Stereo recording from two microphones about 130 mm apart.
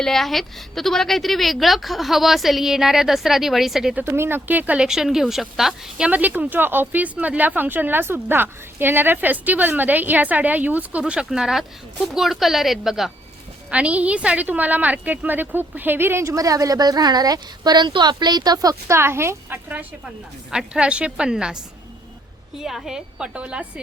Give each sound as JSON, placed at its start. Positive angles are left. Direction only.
{"t": 0.0, "sound": "a woman's voice", "side_deg": 5}
{"t": 4.0, "sound": "a woman's voice", "side_deg": -20}